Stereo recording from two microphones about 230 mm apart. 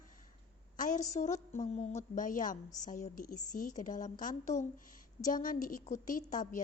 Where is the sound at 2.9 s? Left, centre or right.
Left.